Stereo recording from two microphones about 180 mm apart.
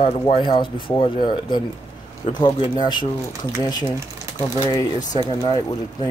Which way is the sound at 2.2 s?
25° left (ahead or behind).